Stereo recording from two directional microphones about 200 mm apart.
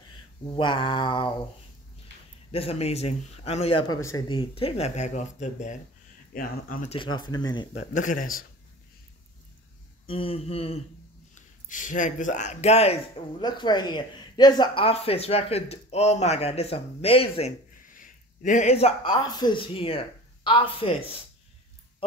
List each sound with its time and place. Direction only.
0.6 s speech: 25° left (ahead or behind)
2.5 s speech: 30° left (ahead or behind)
6.9 s speech: 25° left (ahead or behind)
7.7 s speech: 35° left (ahead or behind)
10.0 s speech: 25° left (ahead or behind)
11.3 s speech: 40° left (ahead or behind)
17.8 s speech: 40° left (ahead or behind)